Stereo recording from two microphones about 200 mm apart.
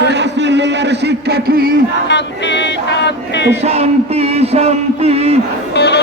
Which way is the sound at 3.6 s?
30° right (ahead or behind).